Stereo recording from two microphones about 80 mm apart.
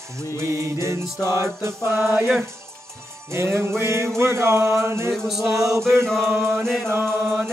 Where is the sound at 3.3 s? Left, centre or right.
Right.